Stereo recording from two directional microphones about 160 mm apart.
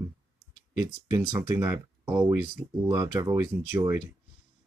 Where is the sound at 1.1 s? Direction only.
20° right (ahead or behind).